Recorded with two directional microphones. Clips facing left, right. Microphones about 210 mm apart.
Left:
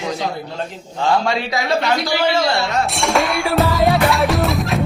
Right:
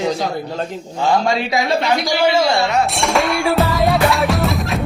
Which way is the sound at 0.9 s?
15° right (ahead or behind).